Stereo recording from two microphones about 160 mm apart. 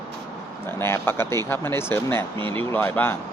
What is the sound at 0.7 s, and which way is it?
Speech, 15° left (ahead or behind).